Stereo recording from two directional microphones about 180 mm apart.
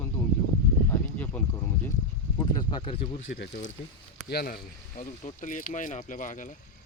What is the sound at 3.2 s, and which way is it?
Speech, 50° left (ahead or behind).